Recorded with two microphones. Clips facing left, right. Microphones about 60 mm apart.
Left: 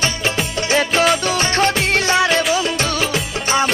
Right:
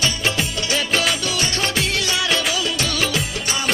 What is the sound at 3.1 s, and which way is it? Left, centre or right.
Music of bollywood, left.